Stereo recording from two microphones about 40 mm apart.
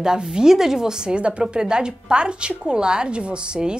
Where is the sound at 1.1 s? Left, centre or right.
Right.